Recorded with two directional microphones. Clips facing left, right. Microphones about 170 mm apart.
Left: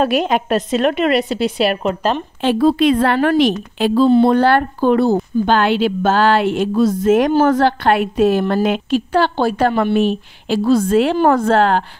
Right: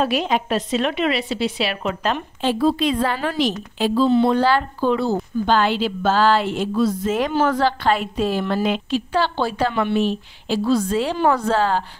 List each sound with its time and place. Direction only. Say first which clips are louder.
0.0 s a woman's voice: left 4 dB; 55° left (ahead or behind)
2.4 s a woman's voice: left 6 dB; 65° left (ahead or behind)
4.1 s a woman's voice: left 5 dB; 45° left (ahead or behind)
4.4 s a woman's voice: left 5 dB; 60° left (ahead or behind)
6.7 s a woman's voice: left 7 dB; 45° left (ahead or behind); by 11.8 s 65° left (ahead or behind)